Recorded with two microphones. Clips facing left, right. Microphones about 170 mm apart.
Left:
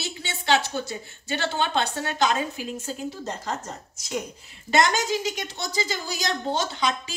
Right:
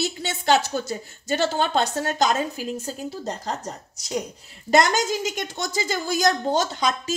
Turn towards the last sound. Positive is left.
turn(degrees=-45)  # may be behind; listen again after turning